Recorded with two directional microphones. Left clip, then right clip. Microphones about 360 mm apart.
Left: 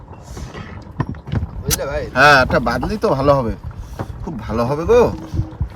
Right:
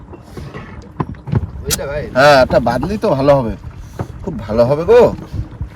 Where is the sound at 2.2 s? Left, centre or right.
Centre.